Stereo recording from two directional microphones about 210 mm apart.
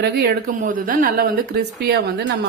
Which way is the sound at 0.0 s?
45° right (ahead or behind).